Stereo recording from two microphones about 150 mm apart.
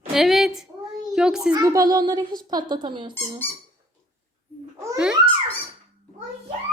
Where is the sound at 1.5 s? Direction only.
25° right (ahead or behind).